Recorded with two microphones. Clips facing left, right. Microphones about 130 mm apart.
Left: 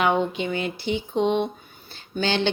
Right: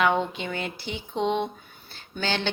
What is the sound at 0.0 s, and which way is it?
Speech, 20° left (ahead or behind).